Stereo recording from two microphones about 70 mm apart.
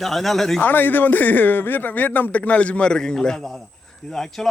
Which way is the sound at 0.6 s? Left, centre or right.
Left.